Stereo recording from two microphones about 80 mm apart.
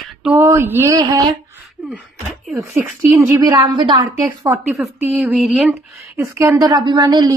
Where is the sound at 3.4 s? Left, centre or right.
Right.